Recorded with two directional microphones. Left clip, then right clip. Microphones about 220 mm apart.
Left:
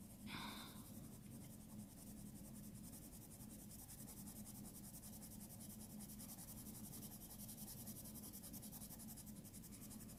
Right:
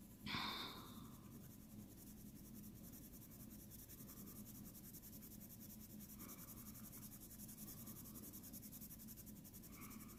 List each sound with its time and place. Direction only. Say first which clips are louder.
0.3 s snort: right 7 dB; 45° right (ahead or behind)